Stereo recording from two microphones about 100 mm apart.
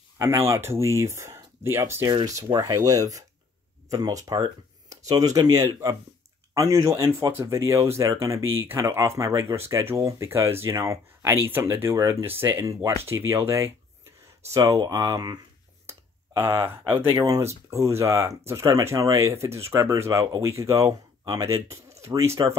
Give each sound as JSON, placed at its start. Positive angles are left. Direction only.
{"t": 0.2, "sound": "speech", "side_deg": -30}
{"t": 15.9, "sound": "a sound", "side_deg": -35}
{"t": 16.9, "sound": "speech", "side_deg": -45}
{"t": 17.4, "sound": "speech", "side_deg": -30}